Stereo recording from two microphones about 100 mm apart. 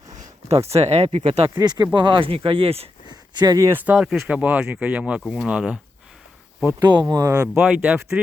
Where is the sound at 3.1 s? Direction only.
45° right (ahead or behind).